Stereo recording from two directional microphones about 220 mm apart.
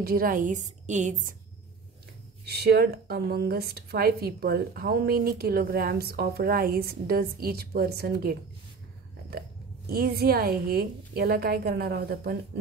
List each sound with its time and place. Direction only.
0.0 s a woman's voice: 40° right (ahead or behind)
2.4 s a woman's voice: 45° right (ahead or behind)
9.8 s a woman's voice: 45° right (ahead or behind)